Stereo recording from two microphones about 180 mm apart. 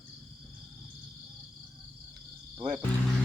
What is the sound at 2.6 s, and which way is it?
Music, 20° right (ahead or behind).